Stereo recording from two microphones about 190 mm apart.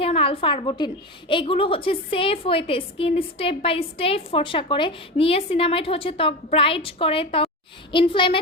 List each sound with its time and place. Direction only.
0.0 s a woman's voice: 30° left (ahead or behind)